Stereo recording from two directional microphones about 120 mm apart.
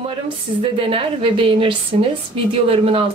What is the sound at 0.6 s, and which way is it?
A woman's voice, 45° right (ahead or behind).